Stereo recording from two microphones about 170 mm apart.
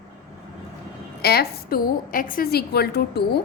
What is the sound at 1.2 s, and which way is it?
A woman's voice, 65° left (ahead or behind).